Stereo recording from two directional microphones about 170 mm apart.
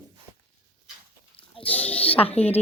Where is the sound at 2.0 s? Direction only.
35° left (ahead or behind).